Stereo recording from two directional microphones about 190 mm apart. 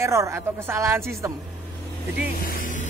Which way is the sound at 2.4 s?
45° left (ahead or behind).